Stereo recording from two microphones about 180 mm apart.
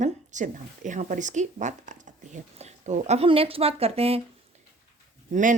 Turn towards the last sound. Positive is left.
turn(degrees=-45)  # may be behind; listen again after turning